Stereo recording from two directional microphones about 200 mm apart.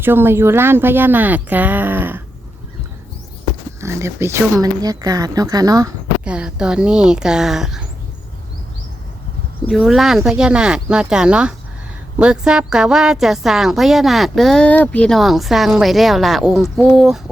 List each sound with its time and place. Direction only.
0.0 s speech: 10° right (ahead or behind)
3.8 s speech: 15° right (ahead or behind)
6.2 s speech: 5° right (ahead or behind)
9.6 s speech: centre (ahead or behind)